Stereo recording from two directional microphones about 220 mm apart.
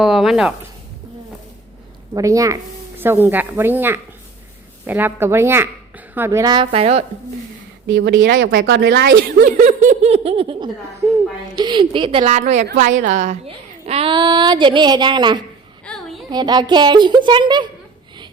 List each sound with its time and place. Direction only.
0.0 s speech: centre (ahead or behind)
2.1 s a woman's voice: 15° right (ahead or behind)
7.9 s a woman's voice: 60° right (ahead or behind); by 15.4 s 20° right (ahead or behind)
15.9 s a sound: centre (ahead or behind)
16.3 s a woman's voice: 20° right (ahead or behind)